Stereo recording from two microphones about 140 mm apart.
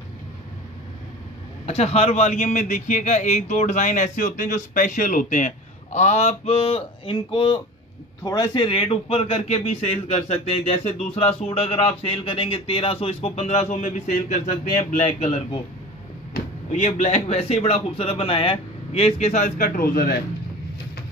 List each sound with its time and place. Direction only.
1.7 s a man's voice: 50° left (ahead or behind)
14.1 s a man's voice: 65° left (ahead or behind)
16.7 s a man's voice: 55° left (ahead or behind); by 20.2 s 90° left